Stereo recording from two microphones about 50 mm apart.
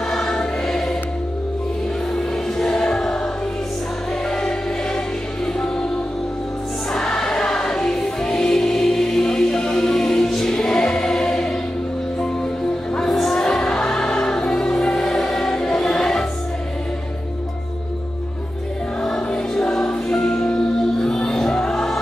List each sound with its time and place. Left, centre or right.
0.1 s choir: centre
2.1 s music: centre
4.3 s music: centre
6.9 s music: centre
12.9 s music: centre
14.7 s choir: centre
19.0 s music: centre